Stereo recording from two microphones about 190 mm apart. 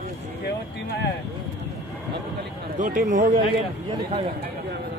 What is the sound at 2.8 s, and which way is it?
Speech, 40° right (ahead or behind).